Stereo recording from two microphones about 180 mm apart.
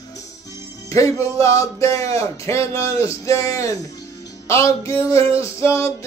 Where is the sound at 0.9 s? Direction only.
15° left (ahead or behind).